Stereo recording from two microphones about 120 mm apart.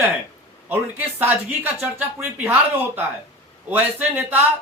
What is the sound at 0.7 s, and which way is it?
Speech, 15° right (ahead or behind).